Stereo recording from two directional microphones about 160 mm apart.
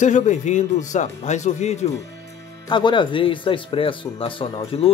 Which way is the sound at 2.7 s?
30° left (ahead or behind).